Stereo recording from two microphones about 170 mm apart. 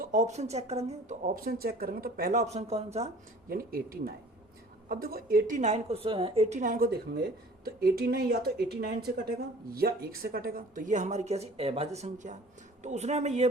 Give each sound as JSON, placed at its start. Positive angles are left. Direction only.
{"t": 0.0, "sound": "speech", "side_deg": -45}
{"t": 1.5, "sound": "a woman's voice", "side_deg": -60}
{"t": 3.5, "sound": "a woman's voice", "side_deg": -60}